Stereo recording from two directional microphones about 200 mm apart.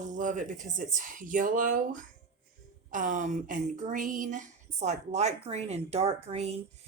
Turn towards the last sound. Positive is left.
turn(degrees=-30)  # may be behind; listen again after turning